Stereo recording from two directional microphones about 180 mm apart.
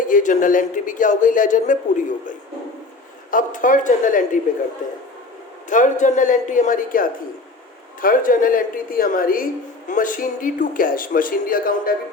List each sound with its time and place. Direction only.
0.0 s speech: 45° left (ahead or behind)
3.3 s speech: 45° left (ahead or behind)
5.6 s speech: 45° left (ahead or behind)